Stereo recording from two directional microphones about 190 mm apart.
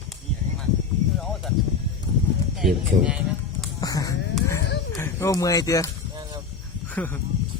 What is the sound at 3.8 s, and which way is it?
Speech, 20° left (ahead or behind).